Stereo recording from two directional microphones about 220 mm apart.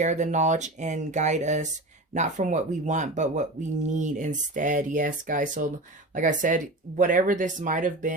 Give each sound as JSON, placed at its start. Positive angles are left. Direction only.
{"t": 0.0, "sound": "speech", "side_deg": -35}